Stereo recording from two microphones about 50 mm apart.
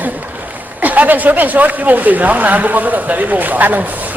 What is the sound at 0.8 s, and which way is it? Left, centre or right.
Speech, right.